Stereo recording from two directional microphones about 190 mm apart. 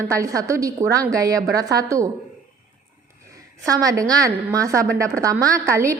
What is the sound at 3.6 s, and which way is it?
A woman's voice, 20° right (ahead or behind).